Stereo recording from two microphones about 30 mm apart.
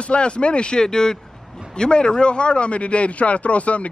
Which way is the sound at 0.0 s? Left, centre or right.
Left.